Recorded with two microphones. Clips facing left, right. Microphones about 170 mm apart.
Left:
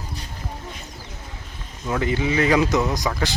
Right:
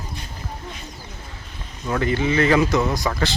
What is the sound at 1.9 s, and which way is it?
Speech, 15° left (ahead or behind).